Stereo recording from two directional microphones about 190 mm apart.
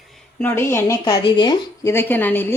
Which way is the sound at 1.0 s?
25° left (ahead or behind).